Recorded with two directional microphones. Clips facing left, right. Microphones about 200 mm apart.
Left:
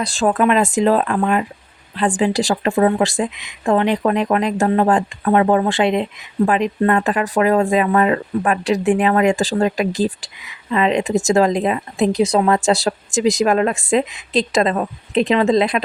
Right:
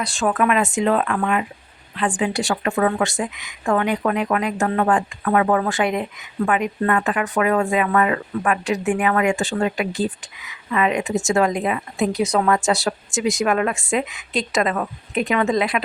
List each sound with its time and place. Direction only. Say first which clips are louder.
0.0 s speech: left 4 dB; 35° left (ahead or behind)